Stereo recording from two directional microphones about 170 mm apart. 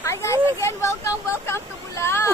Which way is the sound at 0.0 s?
15° left (ahead or behind).